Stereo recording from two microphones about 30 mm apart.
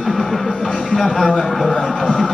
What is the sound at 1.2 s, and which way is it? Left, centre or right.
Speech, centre.